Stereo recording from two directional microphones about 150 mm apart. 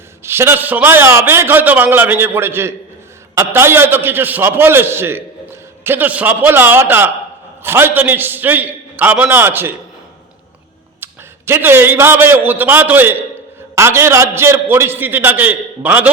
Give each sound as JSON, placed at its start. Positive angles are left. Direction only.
{"t": 0.2, "sound": "a man's voice", "side_deg": -15}
{"t": 11.0, "sound": "a man's voice", "side_deg": -15}